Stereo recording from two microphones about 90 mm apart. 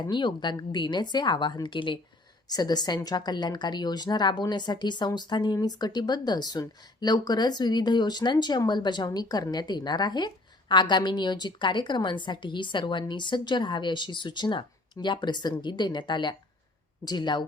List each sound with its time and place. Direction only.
0.0 s speech: 55° left (ahead or behind)
2.5 s a woman's voice: 50° left (ahead or behind)